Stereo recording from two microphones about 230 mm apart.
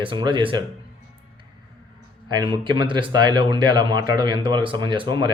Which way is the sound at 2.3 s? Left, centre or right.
Centre.